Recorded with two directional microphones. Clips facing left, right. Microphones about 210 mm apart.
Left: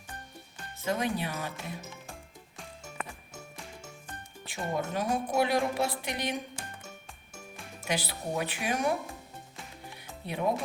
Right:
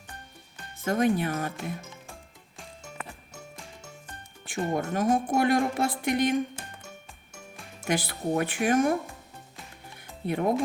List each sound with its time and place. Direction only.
0.9 s a woman's voice: 50° right (ahead or behind)
4.4 s music: 50° right (ahead or behind)
4.8 s a woman's voice: 50° right (ahead or behind)
7.9 s a woman's voice: 50° right (ahead or behind)
10.2 s a woman's voice: 55° right (ahead or behind)